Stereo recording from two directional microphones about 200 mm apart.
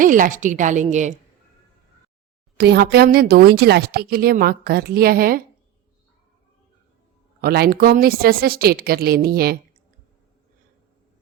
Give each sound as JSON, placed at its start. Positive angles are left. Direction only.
{"t": 0.0, "sound": "a woman's voice", "side_deg": -40}
{"t": 2.6, "sound": "a woman's voice", "side_deg": -55}
{"t": 7.4, "sound": "a woman's voice", "side_deg": -50}